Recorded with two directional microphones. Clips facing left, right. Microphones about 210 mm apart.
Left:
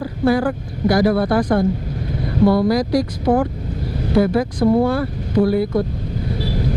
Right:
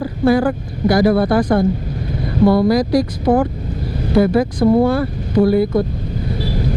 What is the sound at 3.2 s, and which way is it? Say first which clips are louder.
Speech: right 2 dB; 20° right (ahead or behind).